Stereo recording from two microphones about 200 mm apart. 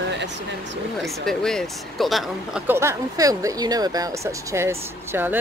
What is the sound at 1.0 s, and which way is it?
Speech, centre (ahead or behind).